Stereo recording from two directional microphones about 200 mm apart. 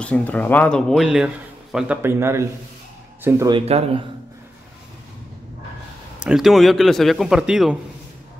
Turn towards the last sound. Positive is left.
turn(degrees=-5)  # may be behind; listen again after turning